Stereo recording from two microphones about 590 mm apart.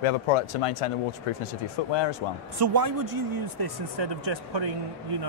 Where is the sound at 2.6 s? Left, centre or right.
Right.